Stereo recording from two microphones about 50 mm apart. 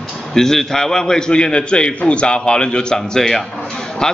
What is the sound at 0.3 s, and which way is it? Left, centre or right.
A man's voice, centre.